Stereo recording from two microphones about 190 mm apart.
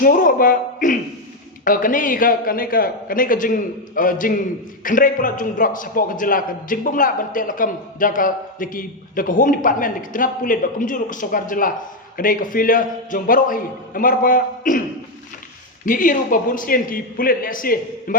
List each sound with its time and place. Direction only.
0.0 s a man's voice: 45° left (ahead or behind)
15.9 s a man's voice: 45° left (ahead or behind)